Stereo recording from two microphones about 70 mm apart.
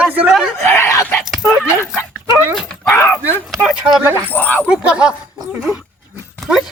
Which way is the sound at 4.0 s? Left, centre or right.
Right.